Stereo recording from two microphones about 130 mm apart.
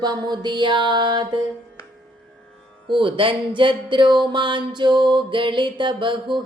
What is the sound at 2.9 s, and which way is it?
Music, 40° right (ahead or behind).